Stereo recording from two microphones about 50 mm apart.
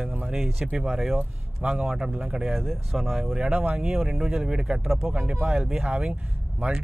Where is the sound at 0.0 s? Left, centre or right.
Right.